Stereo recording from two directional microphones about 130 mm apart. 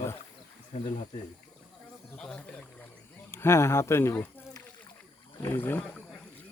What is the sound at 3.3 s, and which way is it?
Speech, 20° left (ahead or behind).